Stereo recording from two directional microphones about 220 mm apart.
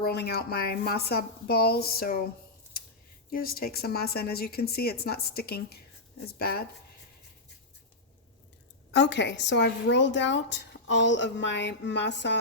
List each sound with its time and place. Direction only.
0.0 s a woman's voice: 45° left (ahead or behind)
3.2 s a woman's voice: 40° left (ahead or behind)
8.9 s a woman's voice: 50° left (ahead or behind)